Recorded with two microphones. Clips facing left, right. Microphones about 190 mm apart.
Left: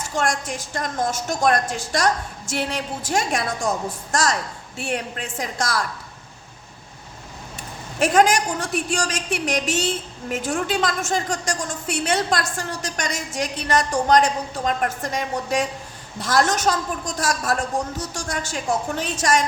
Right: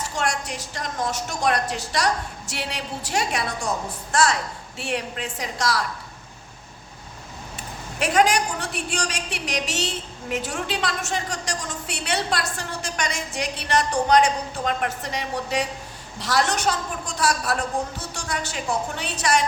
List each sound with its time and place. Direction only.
0.2 s a woman's voice: 50° left (ahead or behind)
7.9 s a woman's voice: 45° left (ahead or behind)